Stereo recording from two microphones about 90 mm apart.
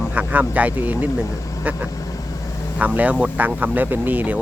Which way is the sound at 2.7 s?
15° right (ahead or behind).